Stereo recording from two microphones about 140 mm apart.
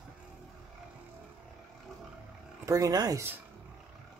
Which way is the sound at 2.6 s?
25° right (ahead or behind).